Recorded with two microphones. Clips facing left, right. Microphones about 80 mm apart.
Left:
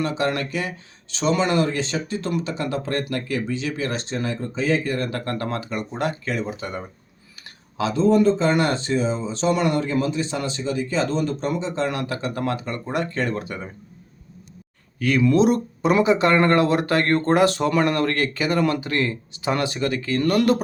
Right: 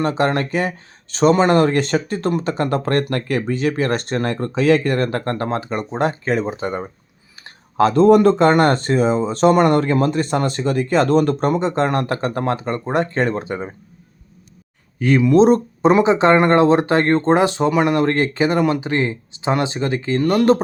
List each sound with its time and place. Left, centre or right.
0.0 s speech: right
5.0 s speech: right
7.8 s speech: right
14.9 s speech: right